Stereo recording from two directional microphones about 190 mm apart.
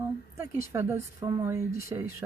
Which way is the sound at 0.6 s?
15° right (ahead or behind).